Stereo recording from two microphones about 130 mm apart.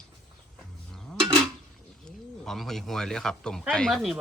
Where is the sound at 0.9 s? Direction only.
5° left (ahead or behind).